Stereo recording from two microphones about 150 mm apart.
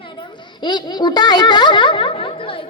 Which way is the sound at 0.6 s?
30° left (ahead or behind).